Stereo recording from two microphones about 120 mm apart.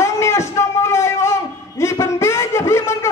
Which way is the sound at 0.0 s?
25° left (ahead or behind).